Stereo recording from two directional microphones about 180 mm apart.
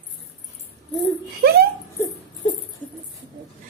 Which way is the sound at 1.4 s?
60° right (ahead or behind).